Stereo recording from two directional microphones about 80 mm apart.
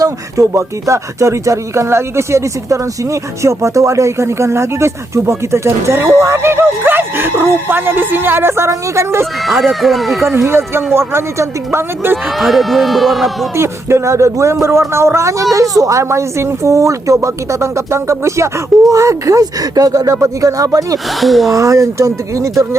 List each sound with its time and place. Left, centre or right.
0.0 s speech: right
9.5 s speech: centre
10.9 s speech: right
12.1 s speech: centre
13.6 s speech: right
21.2 s speech: centre
21.5 s speech: right